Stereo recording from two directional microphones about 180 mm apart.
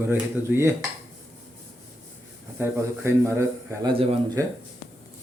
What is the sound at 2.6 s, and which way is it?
A man's voice, 15° right (ahead or behind).